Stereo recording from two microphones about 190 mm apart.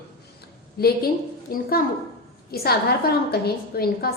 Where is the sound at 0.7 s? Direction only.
55° left (ahead or behind).